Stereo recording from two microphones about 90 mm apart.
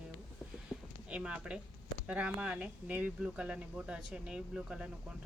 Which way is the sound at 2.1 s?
15° right (ahead or behind).